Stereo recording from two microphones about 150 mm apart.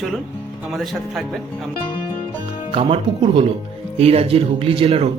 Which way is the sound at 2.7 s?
35° right (ahead or behind).